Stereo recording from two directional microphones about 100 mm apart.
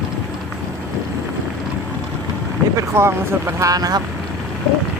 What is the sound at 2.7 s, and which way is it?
Speech, 25° right (ahead or behind).